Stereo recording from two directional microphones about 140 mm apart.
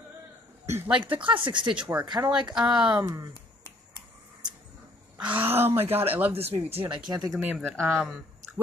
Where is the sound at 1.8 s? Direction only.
10° right (ahead or behind).